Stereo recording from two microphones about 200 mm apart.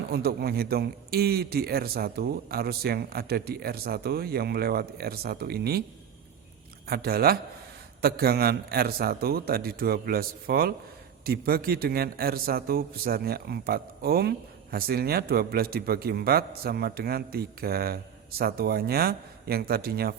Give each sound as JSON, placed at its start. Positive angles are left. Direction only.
{"t": 0.1, "sound": "a man's voice", "side_deg": -50}
{"t": 6.8, "sound": "a man's voice", "side_deg": -50}